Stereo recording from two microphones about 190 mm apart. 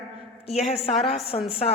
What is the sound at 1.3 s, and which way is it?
Speech, 30° left (ahead or behind).